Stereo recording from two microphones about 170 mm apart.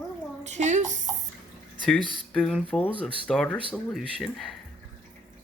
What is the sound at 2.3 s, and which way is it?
Speech, 5° left (ahead or behind).